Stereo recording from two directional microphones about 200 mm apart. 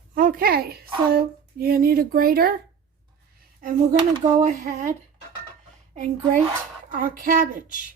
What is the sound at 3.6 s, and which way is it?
Speech, 45° right (ahead or behind).